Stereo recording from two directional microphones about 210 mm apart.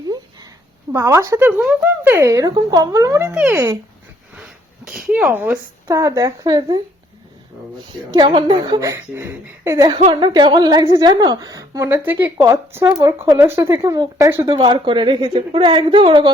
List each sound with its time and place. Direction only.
0.9 s speech: 15° right (ahead or behind)
4.9 s speech: 5° right (ahead or behind); by 6.8 s 20° right (ahead or behind)
8.1 s a woman's voice: 20° right (ahead or behind)